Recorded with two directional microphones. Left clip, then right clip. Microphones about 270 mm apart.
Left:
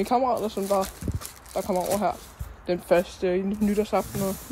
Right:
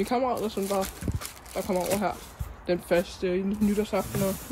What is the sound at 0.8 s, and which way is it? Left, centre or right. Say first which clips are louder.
Speech: even; centre.